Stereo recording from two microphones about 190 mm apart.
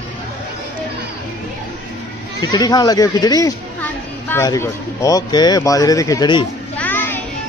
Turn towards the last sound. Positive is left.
turn(degrees=10)  # may be behind; listen again after turning